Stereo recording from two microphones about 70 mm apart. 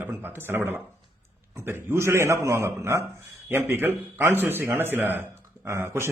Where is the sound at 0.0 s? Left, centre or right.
Right.